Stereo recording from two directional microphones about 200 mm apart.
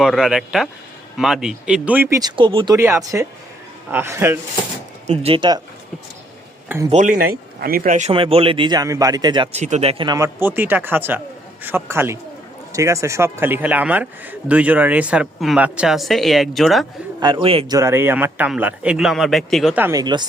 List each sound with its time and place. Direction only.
0.0 s a man's voice: centre (ahead or behind); by 2.7 s 25° right (ahead or behind)
2.7 s a man's voice: 15° right (ahead or behind)
5.0 s speech: 30° right (ahead or behind)
6.9 s a man's voice: 40° right (ahead or behind); by 16.8 s centre (ahead or behind)
17.2 s speech: 20° right (ahead or behind)
17.7 s a man's voice: 15° right (ahead or behind)